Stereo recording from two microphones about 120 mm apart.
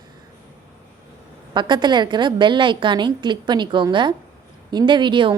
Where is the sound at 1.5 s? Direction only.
40° right (ahead or behind).